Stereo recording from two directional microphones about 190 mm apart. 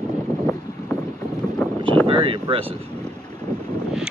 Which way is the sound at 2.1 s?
25° right (ahead or behind).